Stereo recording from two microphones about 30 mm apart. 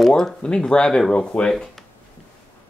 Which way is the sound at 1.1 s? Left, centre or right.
Left.